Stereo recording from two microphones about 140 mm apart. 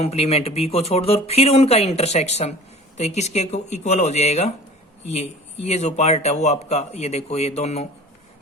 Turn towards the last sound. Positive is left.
turn(degrees=50)  # may be behind; listen again after turning